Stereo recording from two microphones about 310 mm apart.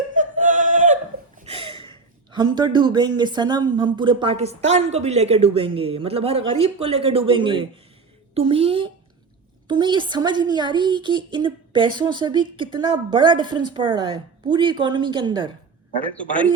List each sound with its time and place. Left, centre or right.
0.1 s music: right
1.4 s a sound: centre
2.3 s a woman's voice: centre
16.1 s a man's voice: centre